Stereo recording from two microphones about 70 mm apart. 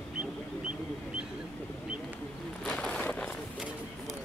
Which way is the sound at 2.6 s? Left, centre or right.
Centre.